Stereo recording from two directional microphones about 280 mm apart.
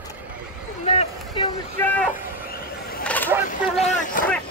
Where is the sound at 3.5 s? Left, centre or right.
Left.